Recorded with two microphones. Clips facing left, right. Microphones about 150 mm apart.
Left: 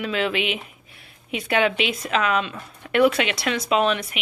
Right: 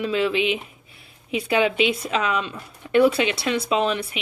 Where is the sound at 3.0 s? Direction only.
30° right (ahead or behind).